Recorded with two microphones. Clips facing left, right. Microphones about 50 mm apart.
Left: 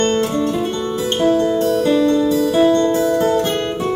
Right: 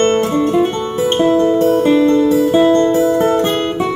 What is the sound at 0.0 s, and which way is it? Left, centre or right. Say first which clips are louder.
Guitar: right 4 dB; right.